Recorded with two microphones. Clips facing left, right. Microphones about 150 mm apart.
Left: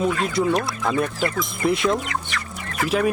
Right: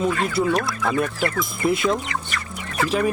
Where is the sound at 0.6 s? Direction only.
20° left (ahead or behind).